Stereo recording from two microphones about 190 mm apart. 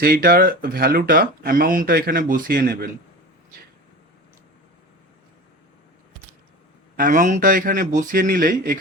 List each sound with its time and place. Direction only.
0.0 s speech: 50° right (ahead or behind)
6.9 s speech: 45° right (ahead or behind)